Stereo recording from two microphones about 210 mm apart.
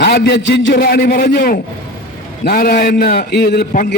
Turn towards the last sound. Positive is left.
turn(degrees=45)  # may be behind; listen again after turning